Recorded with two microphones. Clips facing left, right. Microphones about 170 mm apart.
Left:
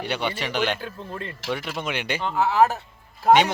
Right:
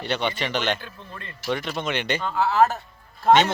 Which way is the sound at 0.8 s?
35° left (ahead or behind).